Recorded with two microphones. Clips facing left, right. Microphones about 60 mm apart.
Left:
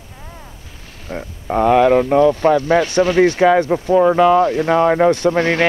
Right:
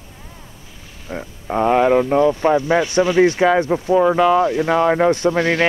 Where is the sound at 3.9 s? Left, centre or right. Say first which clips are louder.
Left 2 dB; centre.